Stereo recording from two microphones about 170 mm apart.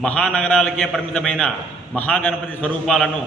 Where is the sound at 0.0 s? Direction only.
5° left (ahead or behind).